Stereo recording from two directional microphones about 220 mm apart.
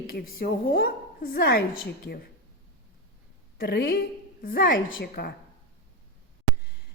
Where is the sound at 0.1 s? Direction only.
45° left (ahead or behind).